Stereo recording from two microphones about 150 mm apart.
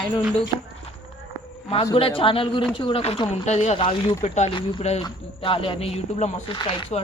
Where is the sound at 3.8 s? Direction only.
35° left (ahead or behind).